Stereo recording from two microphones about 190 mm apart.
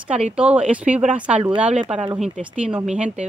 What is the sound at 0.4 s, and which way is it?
Speech, 5° right (ahead or behind).